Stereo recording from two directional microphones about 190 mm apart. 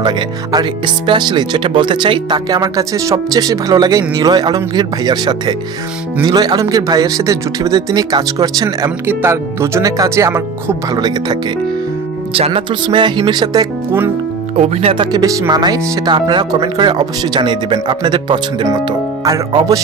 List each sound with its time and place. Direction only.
0.0 s speech: 20° right (ahead or behind)
12.4 s speech: 30° right (ahead or behind)
14.6 s speech: 35° right (ahead or behind)
15.1 s speech: 20° right (ahead or behind)